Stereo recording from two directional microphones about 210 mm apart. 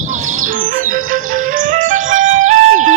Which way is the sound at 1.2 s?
75° right (ahead or behind).